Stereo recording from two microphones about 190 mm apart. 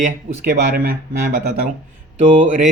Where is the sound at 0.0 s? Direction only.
45° right (ahead or behind).